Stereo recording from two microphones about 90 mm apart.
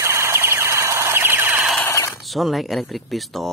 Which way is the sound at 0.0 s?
30° right (ahead or behind).